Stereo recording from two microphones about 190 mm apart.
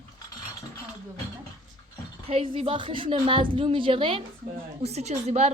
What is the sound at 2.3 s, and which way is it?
A woman's voice, 30° right (ahead or behind).